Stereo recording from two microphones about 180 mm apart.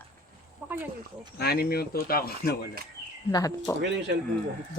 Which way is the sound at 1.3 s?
60° left (ahead or behind).